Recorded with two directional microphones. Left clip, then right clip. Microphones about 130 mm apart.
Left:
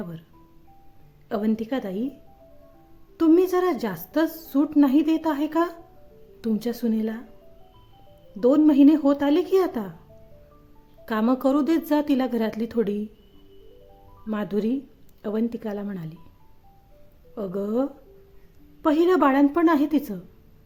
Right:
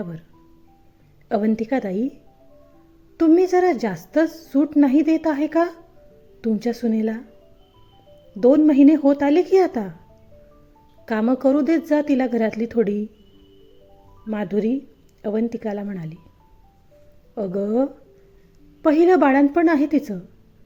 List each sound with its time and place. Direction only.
1.5 s a woman's voice: 25° right (ahead or behind)
3.2 s speech: 15° right (ahead or behind)
8.4 s speech: 15° right (ahead or behind)
11.3 s speech: 15° right (ahead or behind)
14.3 s speech: 10° right (ahead or behind)
17.3 s speech: 20° right (ahead or behind)